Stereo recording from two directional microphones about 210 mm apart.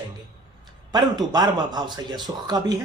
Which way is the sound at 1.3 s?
20° right (ahead or behind).